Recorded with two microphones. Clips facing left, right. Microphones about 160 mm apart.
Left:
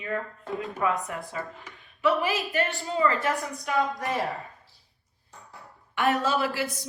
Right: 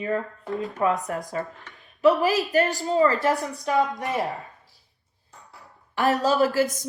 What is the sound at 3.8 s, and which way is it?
Speech, 20° right (ahead or behind).